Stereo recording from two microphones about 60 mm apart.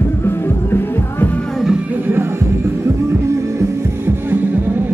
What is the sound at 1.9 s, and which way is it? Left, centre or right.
Music, right.